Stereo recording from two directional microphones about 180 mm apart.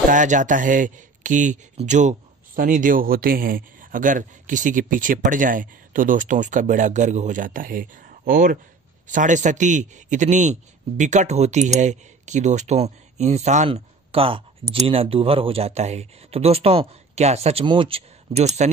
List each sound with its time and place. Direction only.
0.1 s a man's voice: 45° right (ahead or behind)